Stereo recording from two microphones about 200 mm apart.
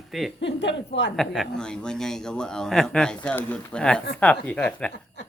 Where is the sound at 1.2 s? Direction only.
Centre (ahead or behind).